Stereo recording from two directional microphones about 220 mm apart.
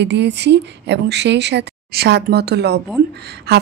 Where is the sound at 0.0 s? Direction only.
50° right (ahead or behind).